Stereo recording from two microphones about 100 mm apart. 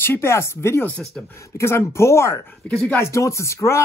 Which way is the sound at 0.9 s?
5° left (ahead or behind).